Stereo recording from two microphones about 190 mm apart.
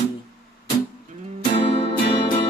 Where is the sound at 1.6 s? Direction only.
30° left (ahead or behind).